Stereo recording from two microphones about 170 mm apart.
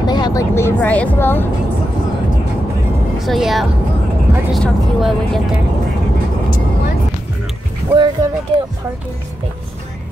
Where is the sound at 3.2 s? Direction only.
Centre (ahead or behind).